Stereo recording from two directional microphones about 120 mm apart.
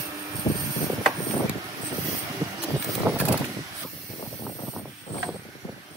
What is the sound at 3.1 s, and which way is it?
Vehicle, 20° right (ahead or behind).